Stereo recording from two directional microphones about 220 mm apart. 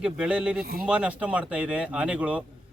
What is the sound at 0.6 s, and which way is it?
Speech, 45° right (ahead or behind).